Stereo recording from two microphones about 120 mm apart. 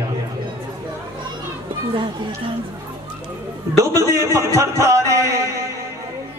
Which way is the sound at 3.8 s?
25° right (ahead or behind).